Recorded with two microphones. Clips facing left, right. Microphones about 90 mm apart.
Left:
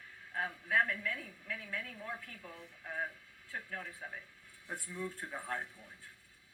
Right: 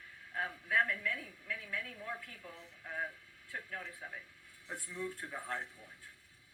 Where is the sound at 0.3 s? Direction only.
30° left (ahead or behind).